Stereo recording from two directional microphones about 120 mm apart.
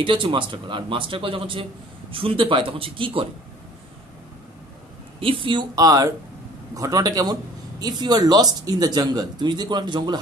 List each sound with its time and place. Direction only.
0.0 s speech: 45° right (ahead or behind)
5.2 s speech: 45° right (ahead or behind)